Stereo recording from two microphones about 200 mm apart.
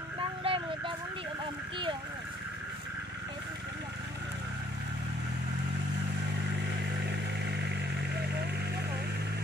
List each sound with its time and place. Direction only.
0.4 s vehicle: 25° right (ahead or behind)
7.1 s vehicle: 60° right (ahead or behind)
8.2 s a sound: 55° right (ahead or behind)